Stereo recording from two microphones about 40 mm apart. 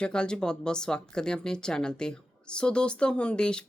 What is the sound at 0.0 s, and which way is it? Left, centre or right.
A woman's voice, left.